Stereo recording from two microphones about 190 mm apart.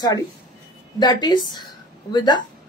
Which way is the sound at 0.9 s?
20° left (ahead or behind).